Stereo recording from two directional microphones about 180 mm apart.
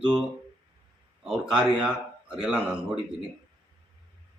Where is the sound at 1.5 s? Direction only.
5° right (ahead or behind).